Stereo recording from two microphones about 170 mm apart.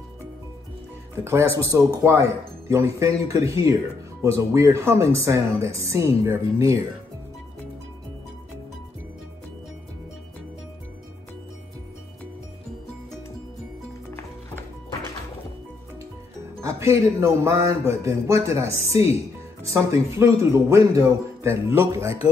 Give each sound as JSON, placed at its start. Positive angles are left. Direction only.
{"t": 1.2, "sound": "speech", "side_deg": -15}
{"t": 16.6, "sound": "speech", "side_deg": -15}